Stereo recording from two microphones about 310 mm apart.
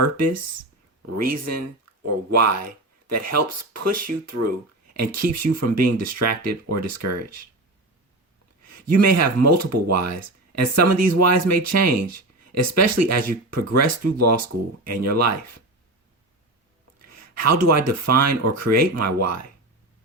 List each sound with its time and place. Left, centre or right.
1.1 s speech: right
8.6 s speech: right
17.0 s speech: right